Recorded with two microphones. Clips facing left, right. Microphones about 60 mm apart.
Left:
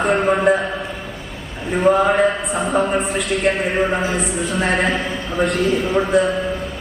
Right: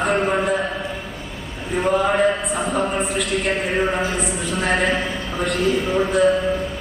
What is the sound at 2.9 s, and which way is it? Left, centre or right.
A man's voice, centre.